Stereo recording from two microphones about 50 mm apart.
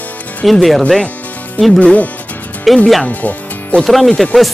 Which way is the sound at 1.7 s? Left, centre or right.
Left.